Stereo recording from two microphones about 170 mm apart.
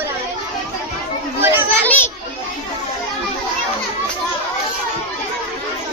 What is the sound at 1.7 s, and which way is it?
Children playing, 10° left (ahead or behind).